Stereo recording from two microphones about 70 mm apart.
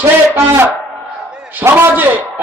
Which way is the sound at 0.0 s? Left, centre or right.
Right.